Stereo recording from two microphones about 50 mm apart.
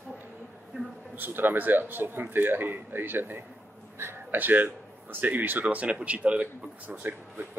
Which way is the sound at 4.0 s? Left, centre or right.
Right.